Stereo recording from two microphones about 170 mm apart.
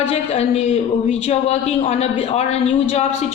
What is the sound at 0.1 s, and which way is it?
A woman's voice, 40° left (ahead or behind).